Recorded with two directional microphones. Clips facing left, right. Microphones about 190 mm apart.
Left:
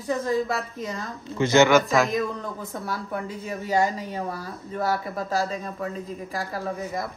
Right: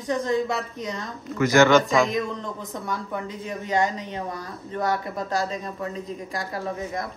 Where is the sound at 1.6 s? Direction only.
5° left (ahead or behind).